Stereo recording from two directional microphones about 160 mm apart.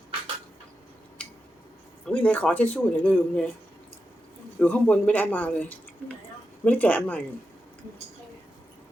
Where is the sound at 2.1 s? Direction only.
10° left (ahead or behind).